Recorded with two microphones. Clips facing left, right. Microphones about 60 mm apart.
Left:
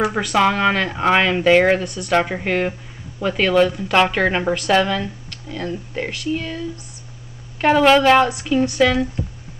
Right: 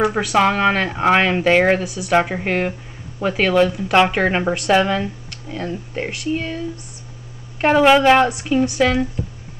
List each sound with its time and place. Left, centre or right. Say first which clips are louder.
0.0 s speech: right 1 dB; centre
4.8 s speech: right 2 dB; centre
7.6 s speech: right 1 dB; centre